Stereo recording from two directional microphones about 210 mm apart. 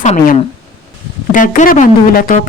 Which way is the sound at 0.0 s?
35° left (ahead or behind).